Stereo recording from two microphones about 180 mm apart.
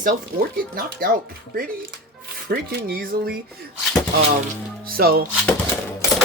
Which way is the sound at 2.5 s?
60° right (ahead or behind).